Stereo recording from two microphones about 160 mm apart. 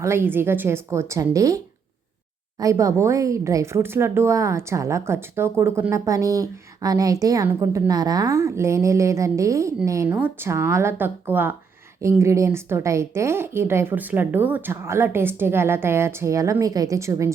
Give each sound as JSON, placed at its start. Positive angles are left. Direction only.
{"t": 0.0, "sound": "a woman's voice", "side_deg": -15}